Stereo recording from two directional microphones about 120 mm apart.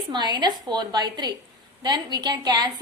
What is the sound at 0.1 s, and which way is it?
A woman's voice, 35° right (ahead or behind).